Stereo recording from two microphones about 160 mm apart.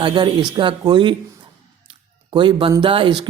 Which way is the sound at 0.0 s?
30° right (ahead or behind).